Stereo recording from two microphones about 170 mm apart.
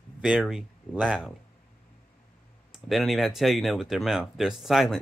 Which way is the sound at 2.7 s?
Centre (ahead or behind).